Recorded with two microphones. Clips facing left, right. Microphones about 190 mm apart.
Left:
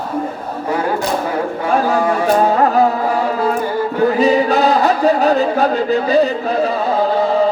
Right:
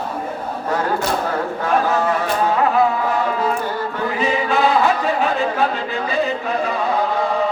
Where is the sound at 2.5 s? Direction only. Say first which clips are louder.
Left 3 dB; 40° left (ahead or behind).